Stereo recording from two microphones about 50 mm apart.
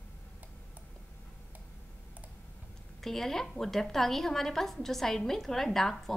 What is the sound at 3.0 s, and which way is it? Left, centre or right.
A woman's voice, centre.